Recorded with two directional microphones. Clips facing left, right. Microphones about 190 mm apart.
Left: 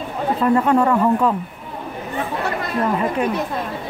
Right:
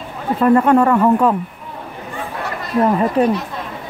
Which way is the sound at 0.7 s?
55° right (ahead or behind).